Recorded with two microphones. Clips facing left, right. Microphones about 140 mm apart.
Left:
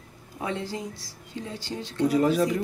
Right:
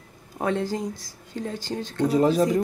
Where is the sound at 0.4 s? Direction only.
50° right (ahead or behind).